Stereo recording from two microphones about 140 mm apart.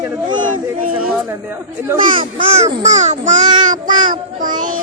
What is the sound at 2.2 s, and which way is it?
A child's voice, 40° right (ahead or behind).